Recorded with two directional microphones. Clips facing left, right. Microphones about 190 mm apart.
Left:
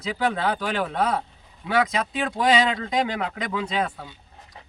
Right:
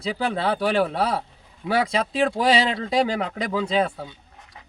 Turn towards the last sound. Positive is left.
turn(degrees=-30)  # may be behind; listen again after turning